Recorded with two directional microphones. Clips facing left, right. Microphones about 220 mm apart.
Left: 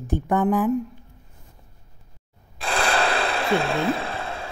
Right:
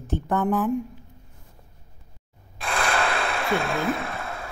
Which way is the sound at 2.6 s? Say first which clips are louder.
Left 2 dB; 35° left (ahead or behind).